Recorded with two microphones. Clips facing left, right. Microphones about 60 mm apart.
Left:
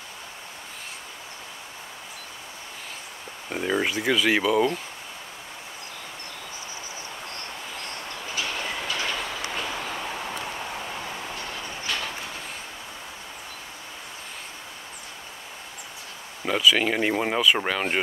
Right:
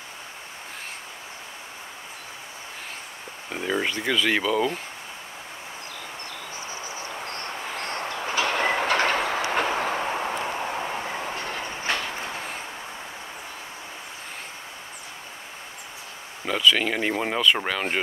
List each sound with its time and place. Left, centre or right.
3.4 s speech: centre
7.8 s train: right
16.4 s speech: centre